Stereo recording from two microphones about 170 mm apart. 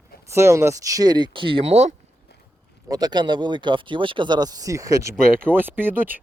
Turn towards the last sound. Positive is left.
turn(degrees=-10)  # may be behind; listen again after turning